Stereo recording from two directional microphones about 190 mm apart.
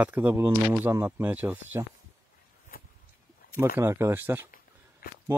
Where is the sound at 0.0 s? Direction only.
10° right (ahead or behind).